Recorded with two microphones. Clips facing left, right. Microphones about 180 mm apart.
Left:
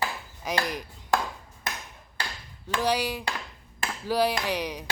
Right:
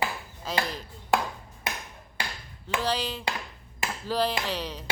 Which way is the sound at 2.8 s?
15° left (ahead or behind).